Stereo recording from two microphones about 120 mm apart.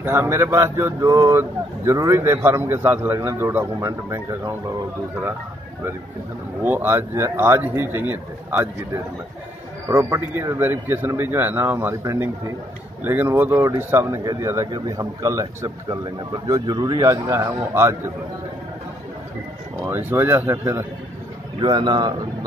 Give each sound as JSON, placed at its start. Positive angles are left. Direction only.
{"t": 0.0, "sound": "speech", "side_deg": -20}
{"t": 6.6, "sound": "speech", "side_deg": -15}
{"t": 9.8, "sound": "speech", "side_deg": -20}
{"t": 19.8, "sound": "speech", "side_deg": -15}
{"t": 21.5, "sound": "a man's voice", "side_deg": -40}